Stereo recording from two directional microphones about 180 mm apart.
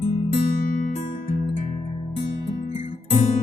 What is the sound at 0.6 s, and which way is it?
Music, 50° left (ahead or behind).